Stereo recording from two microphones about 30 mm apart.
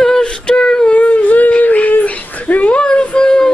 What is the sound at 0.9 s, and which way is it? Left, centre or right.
Howl, left.